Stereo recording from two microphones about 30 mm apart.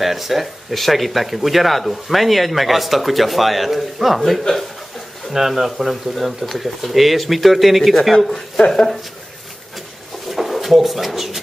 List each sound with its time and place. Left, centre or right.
0.0 s speech: centre
5.3 s speech: centre
6.1 s speech: centre
8.5 s speech: left
10.2 s bird: centre